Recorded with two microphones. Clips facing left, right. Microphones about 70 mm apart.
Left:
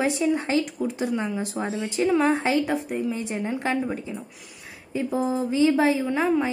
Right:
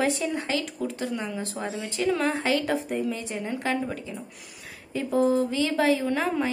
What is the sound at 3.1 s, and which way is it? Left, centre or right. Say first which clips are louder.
A woman's voice: left 3 dB; left.